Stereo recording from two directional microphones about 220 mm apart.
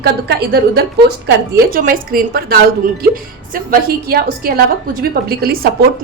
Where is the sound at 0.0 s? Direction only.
45° right (ahead or behind).